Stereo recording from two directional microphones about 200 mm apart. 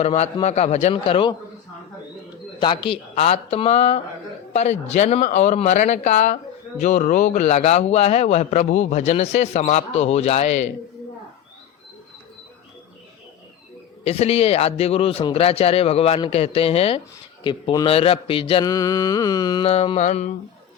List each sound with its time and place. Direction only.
0.0 s speech: 30° left (ahead or behind)
2.6 s speech: 25° left (ahead or behind)
14.0 s speech: 30° left (ahead or behind)